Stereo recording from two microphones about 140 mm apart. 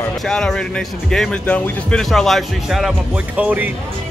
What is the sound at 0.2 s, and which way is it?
Speech, 5° left (ahead or behind).